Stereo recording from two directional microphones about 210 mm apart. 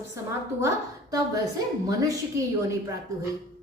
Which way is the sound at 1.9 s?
15° right (ahead or behind).